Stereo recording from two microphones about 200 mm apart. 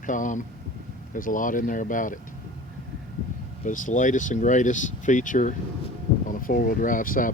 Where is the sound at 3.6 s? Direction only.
40° left (ahead or behind).